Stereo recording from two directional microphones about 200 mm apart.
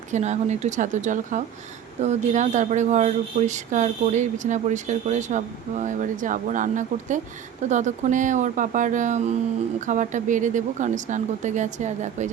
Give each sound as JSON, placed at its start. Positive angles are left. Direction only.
{"t": 0.1, "sound": "speech", "side_deg": -35}